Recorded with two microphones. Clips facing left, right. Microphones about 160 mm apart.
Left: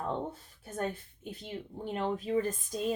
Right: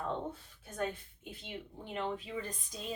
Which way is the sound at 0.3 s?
40° left (ahead or behind).